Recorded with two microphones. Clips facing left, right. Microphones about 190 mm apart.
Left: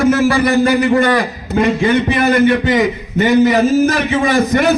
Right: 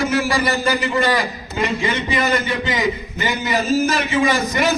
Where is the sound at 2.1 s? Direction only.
60° left (ahead or behind).